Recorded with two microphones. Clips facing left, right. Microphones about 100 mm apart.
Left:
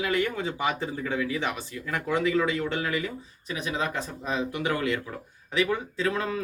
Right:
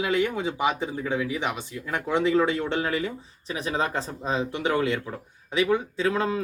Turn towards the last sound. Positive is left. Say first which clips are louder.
# right 3 dB
turn(degrees=-25)  # may be behind; listen again after turning